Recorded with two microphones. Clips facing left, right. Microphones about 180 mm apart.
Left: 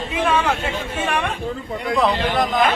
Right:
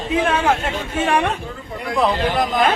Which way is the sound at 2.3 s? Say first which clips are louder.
Even; 5° right (ahead or behind).